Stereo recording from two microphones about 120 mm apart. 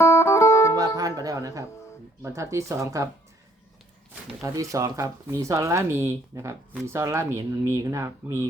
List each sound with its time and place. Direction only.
0.0 s music: 25° left (ahead or behind)
0.9 s music: 30° right (ahead or behind)
2.2 s speech: 25° right (ahead or behind)
4.4 s speech: 30° right (ahead or behind)